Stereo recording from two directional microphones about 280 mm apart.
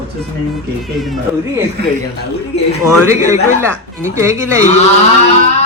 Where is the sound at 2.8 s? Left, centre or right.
Centre.